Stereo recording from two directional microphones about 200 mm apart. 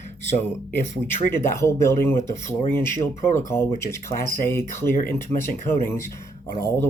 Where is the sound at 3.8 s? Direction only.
15° left (ahead or behind).